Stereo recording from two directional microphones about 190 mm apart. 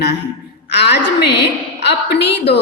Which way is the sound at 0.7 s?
60° left (ahead or behind).